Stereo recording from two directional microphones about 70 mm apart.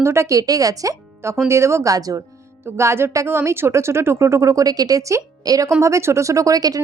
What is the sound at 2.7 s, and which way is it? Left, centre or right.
Speech, right.